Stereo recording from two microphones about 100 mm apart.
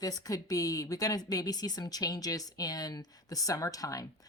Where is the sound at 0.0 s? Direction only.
40° left (ahead or behind).